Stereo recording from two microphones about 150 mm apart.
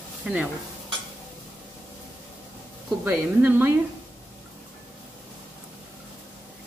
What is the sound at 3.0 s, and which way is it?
Speech, 15° right (ahead or behind).